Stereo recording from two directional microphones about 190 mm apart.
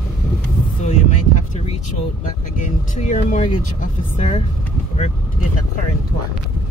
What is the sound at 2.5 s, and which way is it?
Speech, 40° left (ahead or behind).